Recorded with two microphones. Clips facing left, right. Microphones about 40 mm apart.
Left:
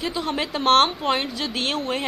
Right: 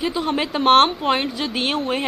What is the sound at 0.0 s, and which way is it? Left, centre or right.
A woman's voice, centre.